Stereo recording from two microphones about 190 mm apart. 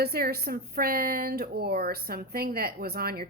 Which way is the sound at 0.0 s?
55° right (ahead or behind).